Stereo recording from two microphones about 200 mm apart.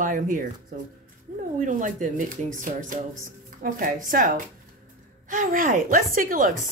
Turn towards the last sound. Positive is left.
turn(degrees=-45)  # may be behind; listen again after turning